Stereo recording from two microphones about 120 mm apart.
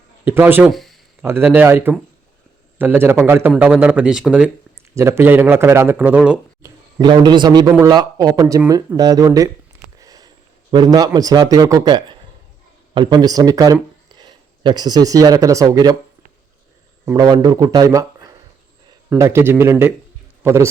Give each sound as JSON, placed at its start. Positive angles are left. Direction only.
{"t": 0.3, "sound": "a man's voice", "side_deg": -20}
{"t": 0.7, "sound": "a sound", "side_deg": 0}
{"t": 1.2, "sound": "a man's voice", "side_deg": -15}
{"t": 4.9, "sound": "a man's voice", "side_deg": -20}
{"t": 6.6, "sound": "a man's voice", "side_deg": -35}
{"t": 7.7, "sound": "a man's voice", "side_deg": -20}
{"t": 7.9, "sound": "a man's voice", "side_deg": -30}
{"t": 17.2, "sound": "a man's voice", "side_deg": -35}